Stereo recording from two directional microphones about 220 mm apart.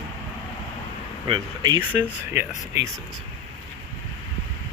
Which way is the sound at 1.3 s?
20° right (ahead or behind).